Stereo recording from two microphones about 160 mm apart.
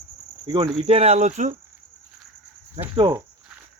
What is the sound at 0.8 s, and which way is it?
Speech, 40° right (ahead or behind).